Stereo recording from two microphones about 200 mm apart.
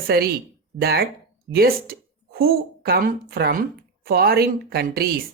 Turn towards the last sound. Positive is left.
turn(degrees=-50)  # may be behind; listen again after turning